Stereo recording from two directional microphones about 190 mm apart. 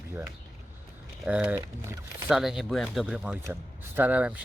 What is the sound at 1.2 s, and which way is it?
Speech, 5° right (ahead or behind).